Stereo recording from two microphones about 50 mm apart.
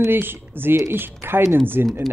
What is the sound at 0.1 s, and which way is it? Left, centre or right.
Speech, right.